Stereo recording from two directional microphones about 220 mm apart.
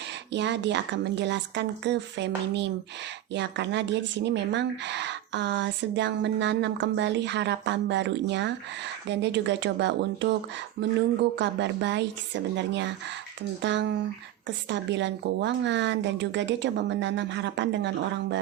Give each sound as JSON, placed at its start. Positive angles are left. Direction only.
{"t": 0.3, "sound": "speech", "side_deg": -55}